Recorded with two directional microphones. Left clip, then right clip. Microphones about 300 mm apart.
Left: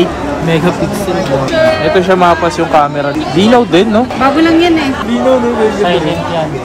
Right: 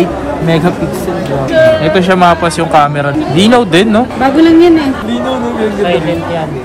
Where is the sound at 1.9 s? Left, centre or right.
Right.